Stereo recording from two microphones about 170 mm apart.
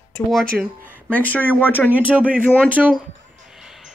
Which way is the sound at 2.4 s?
10° left (ahead or behind).